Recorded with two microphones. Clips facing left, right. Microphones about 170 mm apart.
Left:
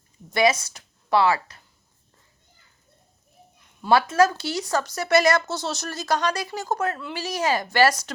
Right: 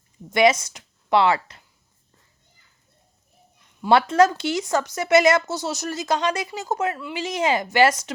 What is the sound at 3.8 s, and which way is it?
Speech, 15° right (ahead or behind).